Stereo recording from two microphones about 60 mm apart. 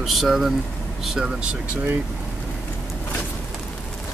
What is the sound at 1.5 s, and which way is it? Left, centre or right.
Speech, right.